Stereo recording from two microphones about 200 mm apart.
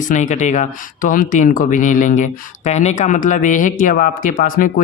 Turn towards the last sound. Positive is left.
turn(degrees=45)  # may be behind; listen again after turning